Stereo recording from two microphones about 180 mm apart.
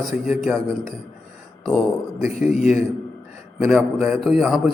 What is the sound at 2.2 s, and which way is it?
A man's voice, centre (ahead or behind).